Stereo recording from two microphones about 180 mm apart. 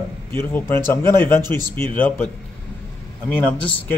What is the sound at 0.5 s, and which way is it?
A man's voice, 10° left (ahead or behind).